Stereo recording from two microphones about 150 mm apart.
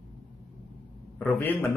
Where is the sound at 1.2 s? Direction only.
15° left (ahead or behind).